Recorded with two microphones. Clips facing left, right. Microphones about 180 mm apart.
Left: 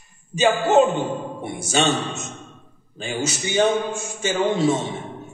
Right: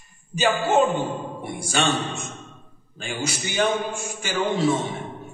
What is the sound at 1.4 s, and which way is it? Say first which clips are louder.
A man's voice: left 3 dB; 25° left (ahead or behind).